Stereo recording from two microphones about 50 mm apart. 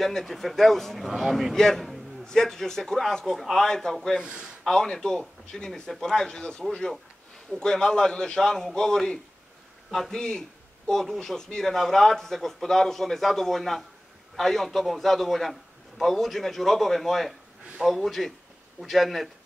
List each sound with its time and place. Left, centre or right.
0.0 s a man's voice: centre
1.5 s a man's voice: centre
4.2 s speech: centre
4.6 s a man's voice: centre